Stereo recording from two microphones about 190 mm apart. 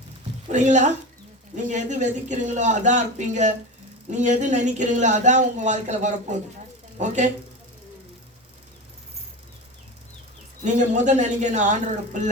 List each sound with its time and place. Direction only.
0.4 s speech: 40° right (ahead or behind)
10.6 s speech: 40° right (ahead or behind)